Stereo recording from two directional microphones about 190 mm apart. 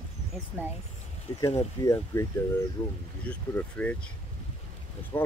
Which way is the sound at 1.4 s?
15° left (ahead or behind).